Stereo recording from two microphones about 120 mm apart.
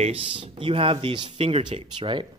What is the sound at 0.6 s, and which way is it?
Speech, 50° right (ahead or behind).